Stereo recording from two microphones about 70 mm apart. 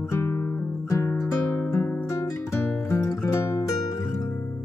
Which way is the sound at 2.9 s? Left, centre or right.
Left.